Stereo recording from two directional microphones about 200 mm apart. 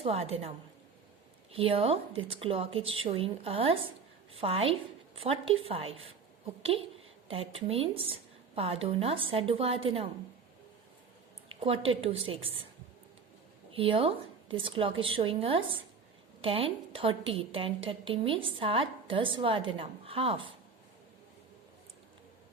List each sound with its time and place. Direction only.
0.0 s a woman's voice: 30° right (ahead or behind)
1.5 s a woman's voice: 30° right (ahead or behind)
7.3 s a woman's voice: 30° right (ahead or behind)
11.6 s a woman's voice: 30° right (ahead or behind)
13.7 s a woman's voice: 25° right (ahead or behind)